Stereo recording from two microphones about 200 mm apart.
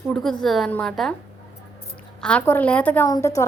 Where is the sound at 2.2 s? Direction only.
5° left (ahead or behind).